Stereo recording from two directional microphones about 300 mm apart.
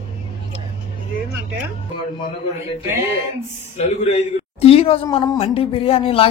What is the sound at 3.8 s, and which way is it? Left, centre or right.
A woman's voice, left.